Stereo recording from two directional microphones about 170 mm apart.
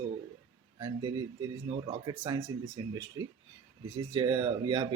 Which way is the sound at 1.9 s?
25° right (ahead or behind).